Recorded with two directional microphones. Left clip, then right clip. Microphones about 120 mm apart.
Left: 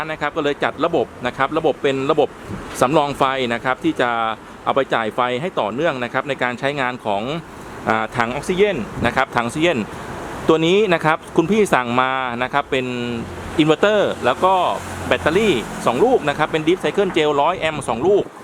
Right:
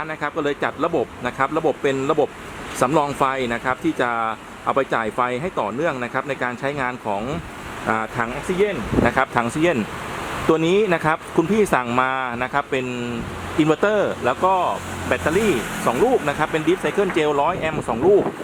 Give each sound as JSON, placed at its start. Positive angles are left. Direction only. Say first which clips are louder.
{"t": 0.1, "sound": "speech", "louder": "left 3 dB", "side_deg": 5}